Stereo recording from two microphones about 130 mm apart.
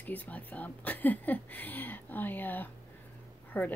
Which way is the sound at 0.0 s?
10° left (ahead or behind).